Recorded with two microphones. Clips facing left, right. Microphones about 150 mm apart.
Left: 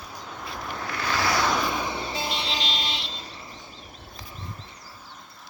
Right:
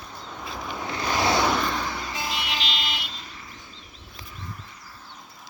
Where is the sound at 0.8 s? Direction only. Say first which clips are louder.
Right 2 dB; 20° right (ahead or behind).